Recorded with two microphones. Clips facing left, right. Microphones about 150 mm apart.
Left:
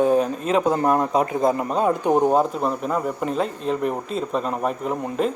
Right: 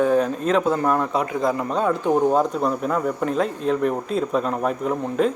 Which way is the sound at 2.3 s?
5° left (ahead or behind).